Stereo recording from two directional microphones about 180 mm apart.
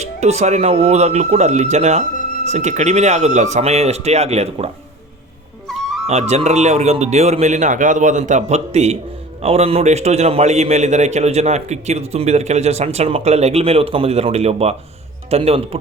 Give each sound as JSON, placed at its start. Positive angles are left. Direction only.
{"t": 0.0, "sound": "a man's voice", "side_deg": -40}
{"t": 5.7, "sound": "music", "side_deg": 0}
{"t": 6.1, "sound": "a man's voice", "side_deg": -35}